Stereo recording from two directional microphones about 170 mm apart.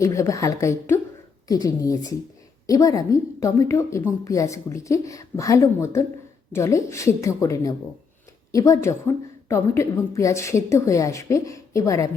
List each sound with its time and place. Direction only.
0.0 s a woman's voice: 20° left (ahead or behind)